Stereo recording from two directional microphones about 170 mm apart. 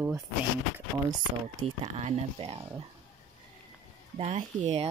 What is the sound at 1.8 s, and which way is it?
Speech, 40° right (ahead or behind).